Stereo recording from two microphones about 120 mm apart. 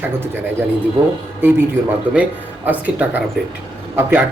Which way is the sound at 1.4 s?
20° right (ahead or behind).